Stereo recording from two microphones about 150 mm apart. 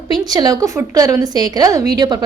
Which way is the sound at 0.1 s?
25° right (ahead or behind).